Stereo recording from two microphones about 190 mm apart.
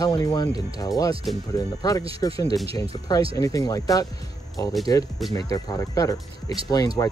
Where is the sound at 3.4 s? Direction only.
20° left (ahead or behind).